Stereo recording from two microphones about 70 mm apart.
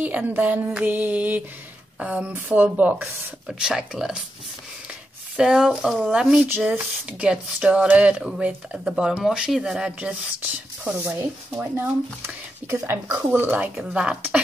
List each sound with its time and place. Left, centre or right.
0.0 s speech: right
3.5 s speech: centre
5.3 s speech: centre
11.1 s speech: right
13.8 s speech: centre